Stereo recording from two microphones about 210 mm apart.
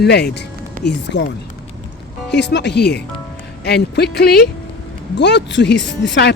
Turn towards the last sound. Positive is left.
turn(degrees=55)  # may be behind; listen again after turning